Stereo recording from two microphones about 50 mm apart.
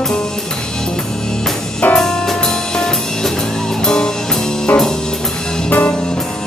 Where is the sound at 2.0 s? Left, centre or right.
Centre.